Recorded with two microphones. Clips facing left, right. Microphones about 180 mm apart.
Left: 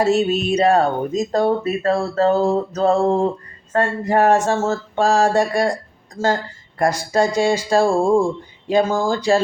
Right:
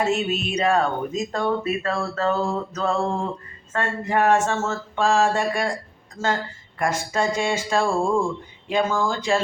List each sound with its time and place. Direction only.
0.0 s speech: 35° left (ahead or behind)
6.2 s a woman's voice: 10° left (ahead or behind)
6.7 s speech: 35° left (ahead or behind)